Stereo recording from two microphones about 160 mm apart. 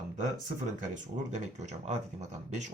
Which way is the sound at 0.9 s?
45° right (ahead or behind).